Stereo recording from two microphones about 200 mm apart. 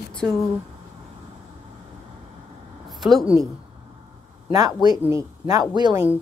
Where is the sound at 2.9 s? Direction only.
Centre (ahead or behind).